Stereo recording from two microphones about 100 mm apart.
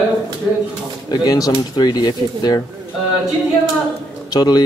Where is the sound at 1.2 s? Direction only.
40° left (ahead or behind).